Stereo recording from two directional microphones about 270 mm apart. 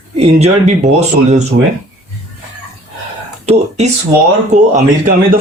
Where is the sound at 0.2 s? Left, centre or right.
Right.